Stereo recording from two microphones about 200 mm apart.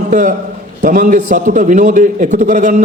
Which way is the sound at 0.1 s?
40° right (ahead or behind).